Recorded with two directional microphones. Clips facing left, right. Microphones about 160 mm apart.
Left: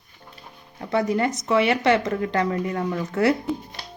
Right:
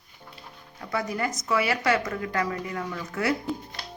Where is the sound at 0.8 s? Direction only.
25° left (ahead or behind).